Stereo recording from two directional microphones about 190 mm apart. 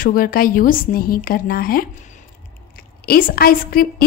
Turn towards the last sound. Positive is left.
turn(degrees=50)  # may be behind; listen again after turning